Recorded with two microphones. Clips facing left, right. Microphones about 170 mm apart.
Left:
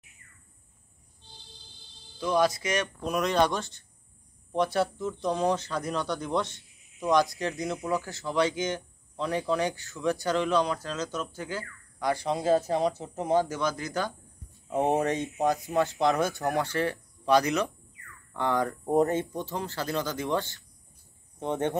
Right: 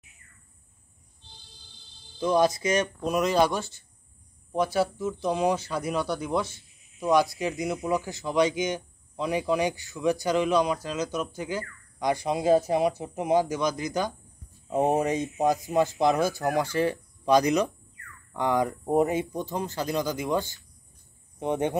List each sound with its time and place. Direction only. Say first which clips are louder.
2.1 s speech: right 2 dB; 25° right (ahead or behind)
3.2 s speech: right 2 dB; 5° right (ahead or behind)